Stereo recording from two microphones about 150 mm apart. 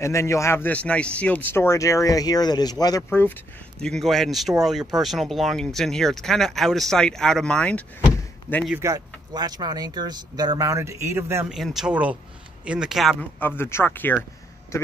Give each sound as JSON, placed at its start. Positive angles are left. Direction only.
{"t": 0.0, "sound": "a man's voice", "side_deg": 20}
{"t": 3.0, "sound": "speech", "side_deg": 15}
{"t": 8.7, "sound": "speech", "side_deg": -20}
{"t": 11.4, "sound": "speech", "side_deg": 0}
{"t": 13.2, "sound": "speech", "side_deg": 15}